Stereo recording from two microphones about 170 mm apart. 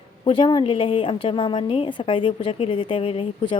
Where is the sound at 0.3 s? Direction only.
25° left (ahead or behind).